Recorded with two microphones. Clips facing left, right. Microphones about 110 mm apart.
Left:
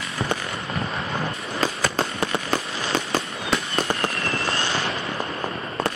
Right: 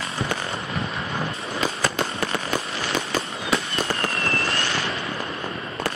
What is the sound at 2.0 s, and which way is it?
Fireworks, 25° left (ahead or behind).